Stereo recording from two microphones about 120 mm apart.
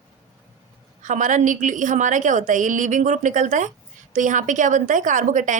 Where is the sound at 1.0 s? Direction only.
90° right.